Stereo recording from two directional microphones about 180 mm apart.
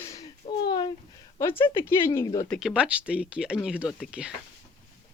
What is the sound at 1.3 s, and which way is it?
Speech, 15° left (ahead or behind).